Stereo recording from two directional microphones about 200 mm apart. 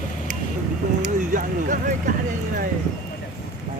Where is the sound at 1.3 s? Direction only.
40° right (ahead or behind).